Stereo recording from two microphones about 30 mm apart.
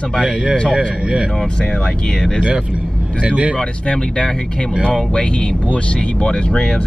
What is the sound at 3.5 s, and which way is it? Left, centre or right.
Speech, left.